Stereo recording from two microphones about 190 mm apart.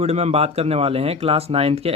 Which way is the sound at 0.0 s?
35° right (ahead or behind).